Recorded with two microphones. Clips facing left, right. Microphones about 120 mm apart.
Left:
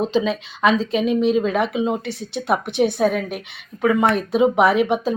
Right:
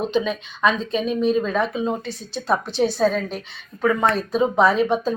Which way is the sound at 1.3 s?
20° left (ahead or behind).